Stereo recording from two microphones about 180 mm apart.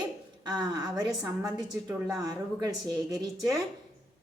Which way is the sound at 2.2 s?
20° right (ahead or behind).